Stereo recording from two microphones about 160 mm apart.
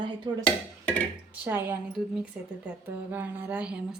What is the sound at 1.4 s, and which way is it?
A woman's voice, 15° right (ahead or behind).